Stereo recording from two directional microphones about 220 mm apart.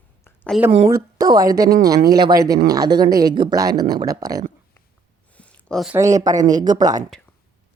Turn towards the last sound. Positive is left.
turn(degrees=-15)  # may be behind; listen again after turning